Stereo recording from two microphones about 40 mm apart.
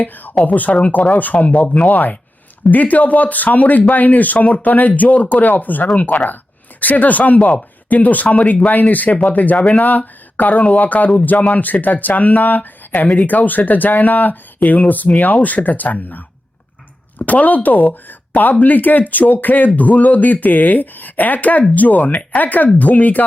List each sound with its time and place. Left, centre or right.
0.0 s speech: left